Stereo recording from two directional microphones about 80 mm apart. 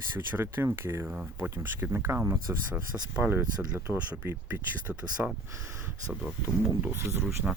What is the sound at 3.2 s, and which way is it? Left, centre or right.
Speech, centre.